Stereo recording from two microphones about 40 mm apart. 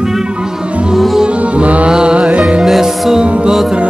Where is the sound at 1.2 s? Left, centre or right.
Right.